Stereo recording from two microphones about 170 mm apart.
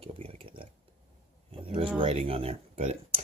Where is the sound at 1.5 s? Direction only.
35° right (ahead or behind).